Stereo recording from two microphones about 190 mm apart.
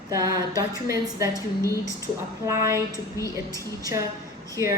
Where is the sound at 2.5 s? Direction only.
15° right (ahead or behind).